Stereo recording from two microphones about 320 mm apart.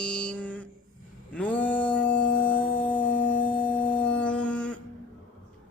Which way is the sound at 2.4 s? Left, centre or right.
Centre.